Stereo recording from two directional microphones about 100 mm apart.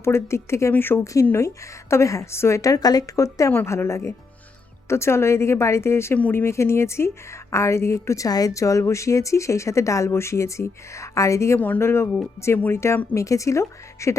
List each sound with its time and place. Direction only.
0.0 s a woman's voice: 25° left (ahead or behind)
3.5 s a woman's voice: 20° left (ahead or behind)
6.1 s speech: 15° left (ahead or behind)
6.4 s a woman's voice: 30° left (ahead or behind)